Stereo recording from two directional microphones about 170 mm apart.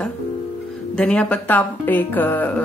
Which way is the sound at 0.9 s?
5° left (ahead or behind).